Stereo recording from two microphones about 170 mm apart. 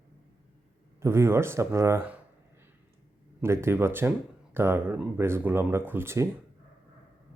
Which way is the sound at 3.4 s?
15° right (ahead or behind).